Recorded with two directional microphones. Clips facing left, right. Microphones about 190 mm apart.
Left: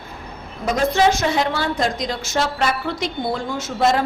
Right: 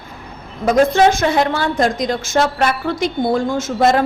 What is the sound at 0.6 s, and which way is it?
A woman's voice, 55° right (ahead or behind).